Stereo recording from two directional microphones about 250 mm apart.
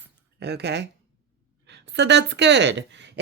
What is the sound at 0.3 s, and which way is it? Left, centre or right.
A woman's voice, right.